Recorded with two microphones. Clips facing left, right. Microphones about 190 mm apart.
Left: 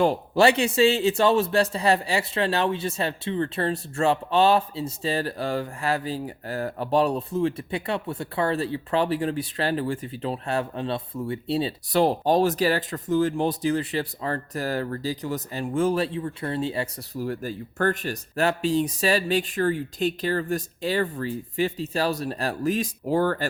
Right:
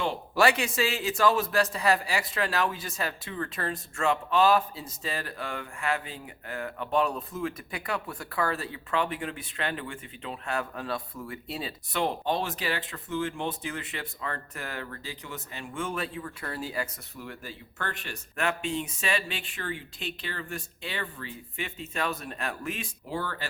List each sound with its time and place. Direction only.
0.3 s a man's voice: 30° left (ahead or behind); by 23.5 s 45° left (ahead or behind)